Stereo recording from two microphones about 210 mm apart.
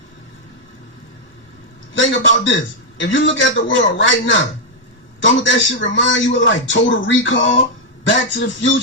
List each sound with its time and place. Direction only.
2.0 s a man's voice: 60° left (ahead or behind)